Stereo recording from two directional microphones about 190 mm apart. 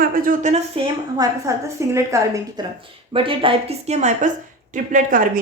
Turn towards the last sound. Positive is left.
turn(degrees=-45)  # may be behind; listen again after turning